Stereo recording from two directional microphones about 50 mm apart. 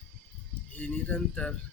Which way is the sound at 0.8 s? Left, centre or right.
Left.